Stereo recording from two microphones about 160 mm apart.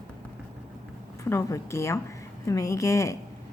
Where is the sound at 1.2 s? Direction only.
20° left (ahead or behind).